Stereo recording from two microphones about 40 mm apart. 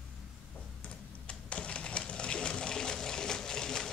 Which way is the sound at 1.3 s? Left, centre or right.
Left.